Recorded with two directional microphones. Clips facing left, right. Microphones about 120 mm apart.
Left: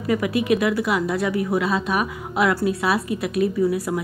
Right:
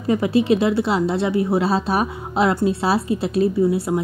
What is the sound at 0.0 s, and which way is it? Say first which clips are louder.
A woman's voice: right 3 dB; 30° right (ahead or behind).